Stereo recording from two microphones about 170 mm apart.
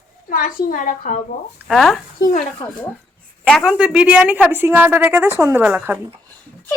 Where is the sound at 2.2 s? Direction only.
50° left (ahead or behind).